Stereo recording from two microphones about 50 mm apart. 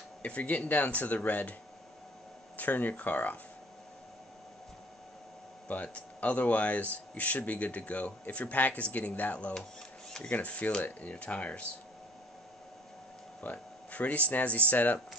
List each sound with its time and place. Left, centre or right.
0.2 s speech: left
2.5 s speech: left
5.7 s speech: left
13.4 s speech: left